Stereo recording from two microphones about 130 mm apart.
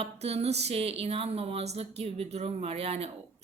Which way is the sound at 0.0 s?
55° right (ahead or behind).